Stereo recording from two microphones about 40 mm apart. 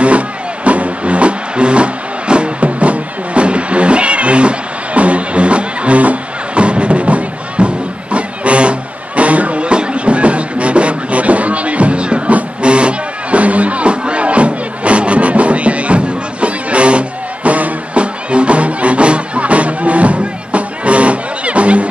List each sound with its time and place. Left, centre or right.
0.7 s music: right